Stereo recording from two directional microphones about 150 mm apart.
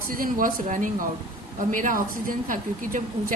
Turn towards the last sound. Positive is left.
turn(degrees=-65)  # may be behind; listen again after turning